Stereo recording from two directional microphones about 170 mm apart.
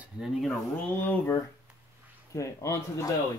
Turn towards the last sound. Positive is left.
turn(degrees=15)  # may be behind; listen again after turning